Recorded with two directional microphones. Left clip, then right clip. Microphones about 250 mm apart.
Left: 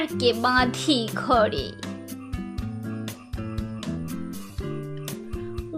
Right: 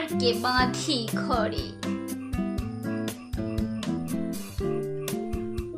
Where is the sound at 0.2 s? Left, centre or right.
Left.